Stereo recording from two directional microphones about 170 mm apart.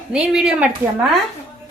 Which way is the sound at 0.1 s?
5° right (ahead or behind).